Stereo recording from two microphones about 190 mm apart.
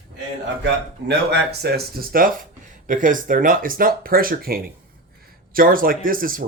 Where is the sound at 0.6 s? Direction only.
60° right (ahead or behind).